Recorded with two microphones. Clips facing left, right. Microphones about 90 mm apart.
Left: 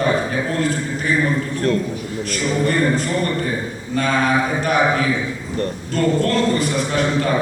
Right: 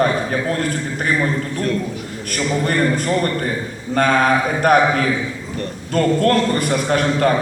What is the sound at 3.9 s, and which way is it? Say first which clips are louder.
A man's voice: right 3 dB; 50° right (ahead or behind).